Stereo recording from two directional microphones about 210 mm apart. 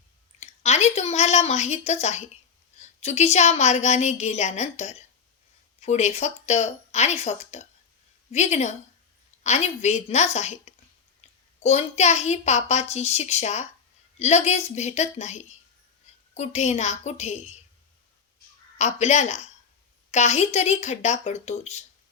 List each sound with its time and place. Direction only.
0.3 s a woman's voice: 30° left (ahead or behind)
18.8 s a woman's voice: 35° left (ahead or behind)